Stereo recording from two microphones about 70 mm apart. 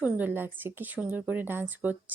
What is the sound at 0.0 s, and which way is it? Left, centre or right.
Speech, right.